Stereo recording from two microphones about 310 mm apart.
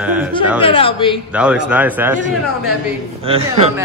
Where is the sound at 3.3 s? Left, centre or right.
Centre.